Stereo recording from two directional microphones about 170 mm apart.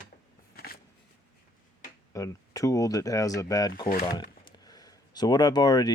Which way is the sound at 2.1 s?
20° left (ahead or behind).